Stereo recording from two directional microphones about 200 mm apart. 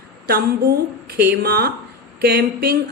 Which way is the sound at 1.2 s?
50° right (ahead or behind).